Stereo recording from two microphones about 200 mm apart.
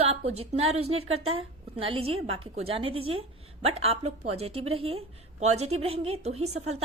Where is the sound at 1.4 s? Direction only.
25° right (ahead or behind).